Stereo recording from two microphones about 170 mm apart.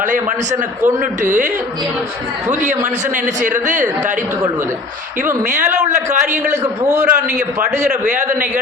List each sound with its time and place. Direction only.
1.2 s speech: 50° right (ahead or behind)
2.5 s speech: 45° right (ahead or behind)
5.9 s speech: 50° right (ahead or behind)
6.3 s a man's voice: 15° right (ahead or behind)